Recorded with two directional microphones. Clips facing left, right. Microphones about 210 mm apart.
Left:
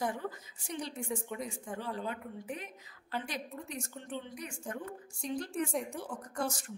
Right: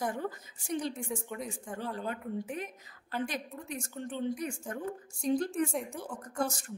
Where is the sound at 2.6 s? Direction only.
50° right (ahead or behind).